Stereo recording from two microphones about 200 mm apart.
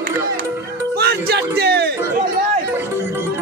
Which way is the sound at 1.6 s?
55° right (ahead or behind).